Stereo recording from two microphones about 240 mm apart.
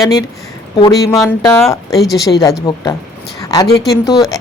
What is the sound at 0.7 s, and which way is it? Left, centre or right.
Speech, centre.